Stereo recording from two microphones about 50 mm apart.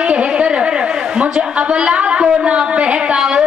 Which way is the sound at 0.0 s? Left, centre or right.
Right.